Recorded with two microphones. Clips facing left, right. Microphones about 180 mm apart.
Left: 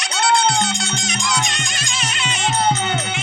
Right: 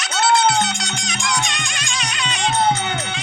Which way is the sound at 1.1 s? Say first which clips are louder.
Even; 20° left (ahead or behind).